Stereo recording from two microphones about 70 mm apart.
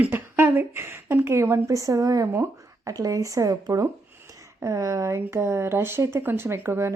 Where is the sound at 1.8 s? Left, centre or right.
Right.